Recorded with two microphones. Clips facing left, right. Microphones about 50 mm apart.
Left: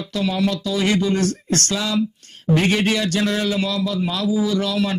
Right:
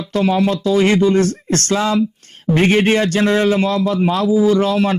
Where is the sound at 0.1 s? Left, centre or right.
Right.